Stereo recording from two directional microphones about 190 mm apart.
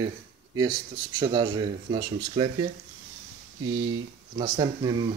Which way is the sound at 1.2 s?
25° right (ahead or behind).